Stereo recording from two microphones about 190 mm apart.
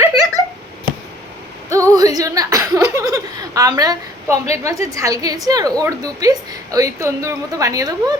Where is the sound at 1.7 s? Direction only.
20° right (ahead or behind).